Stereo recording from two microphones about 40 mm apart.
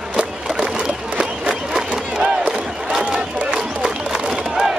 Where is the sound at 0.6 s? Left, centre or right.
Right.